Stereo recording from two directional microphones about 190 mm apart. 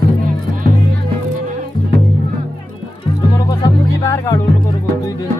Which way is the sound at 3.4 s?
20° left (ahead or behind).